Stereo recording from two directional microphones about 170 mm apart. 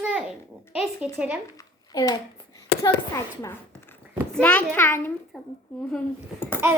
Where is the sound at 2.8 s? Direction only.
20° left (ahead or behind).